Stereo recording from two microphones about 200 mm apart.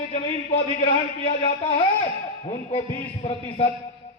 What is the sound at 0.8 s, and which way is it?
A man's voice, 30° left (ahead or behind).